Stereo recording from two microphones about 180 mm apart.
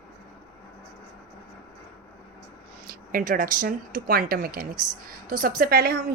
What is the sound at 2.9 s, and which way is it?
A woman's voice, 50° right (ahead or behind).